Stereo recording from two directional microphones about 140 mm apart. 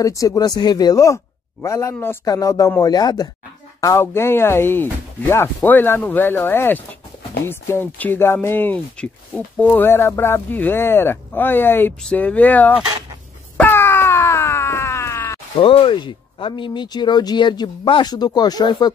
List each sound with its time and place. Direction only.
0.0 s speech: 25° left (ahead or behind)
3.8 s speech: 20° left (ahead or behind)
13.6 s groan: 15° left (ahead or behind)
15.5 s speech: 40° left (ahead or behind)